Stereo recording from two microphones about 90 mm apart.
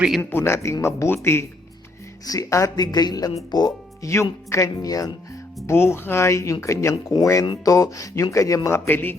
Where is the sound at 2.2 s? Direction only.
35° left (ahead or behind).